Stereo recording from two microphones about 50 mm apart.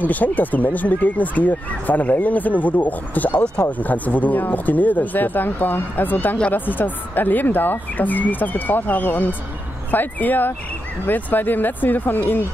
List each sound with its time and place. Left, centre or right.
0.0 s speech: left